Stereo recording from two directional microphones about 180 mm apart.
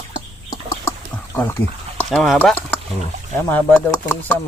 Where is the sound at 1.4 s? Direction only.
10° left (ahead or behind).